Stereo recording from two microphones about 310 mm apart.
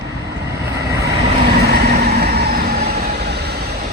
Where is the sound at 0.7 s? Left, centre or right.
Centre.